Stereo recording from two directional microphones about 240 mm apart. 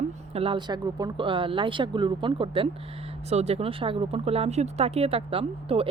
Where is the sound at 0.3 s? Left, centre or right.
Right.